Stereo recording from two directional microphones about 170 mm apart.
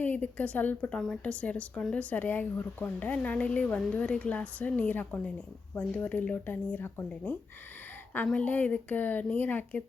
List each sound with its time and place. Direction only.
0.0 s speech: 10° left (ahead or behind)